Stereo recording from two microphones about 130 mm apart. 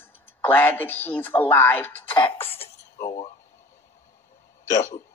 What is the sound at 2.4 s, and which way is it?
Cough, 50° left (ahead or behind).